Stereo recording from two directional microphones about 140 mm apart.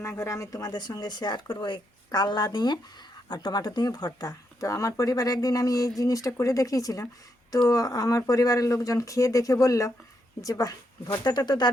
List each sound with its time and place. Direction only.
0.0 s speech: 20° left (ahead or behind)